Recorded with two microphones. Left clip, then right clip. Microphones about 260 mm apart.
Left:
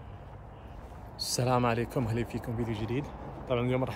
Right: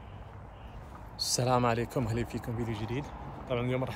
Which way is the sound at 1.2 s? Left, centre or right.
Centre.